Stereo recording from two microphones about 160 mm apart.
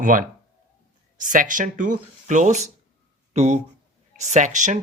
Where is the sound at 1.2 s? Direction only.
55° right (ahead or behind).